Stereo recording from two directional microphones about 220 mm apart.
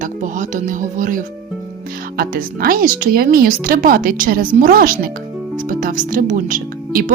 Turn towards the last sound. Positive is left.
turn(degrees=-40)  # may be behind; listen again after turning